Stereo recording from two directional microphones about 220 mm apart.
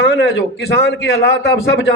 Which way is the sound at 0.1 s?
50° left (ahead or behind).